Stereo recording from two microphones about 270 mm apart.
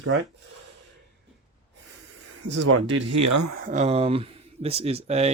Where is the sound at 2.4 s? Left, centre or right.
Right.